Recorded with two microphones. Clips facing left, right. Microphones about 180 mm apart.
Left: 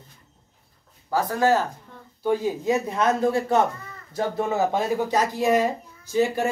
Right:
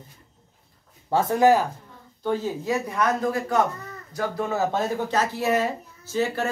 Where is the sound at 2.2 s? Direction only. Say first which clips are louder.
Left 3 dB; 10° left (ahead or behind).